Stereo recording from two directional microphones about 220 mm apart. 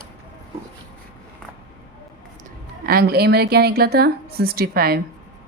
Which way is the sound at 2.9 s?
45° right (ahead or behind).